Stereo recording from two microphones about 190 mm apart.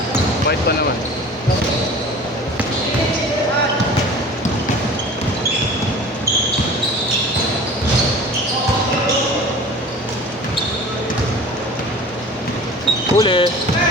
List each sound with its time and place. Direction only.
13.1 s speech: 25° left (ahead or behind)